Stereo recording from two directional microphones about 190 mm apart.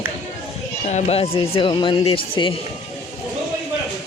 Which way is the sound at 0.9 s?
35° left (ahead or behind).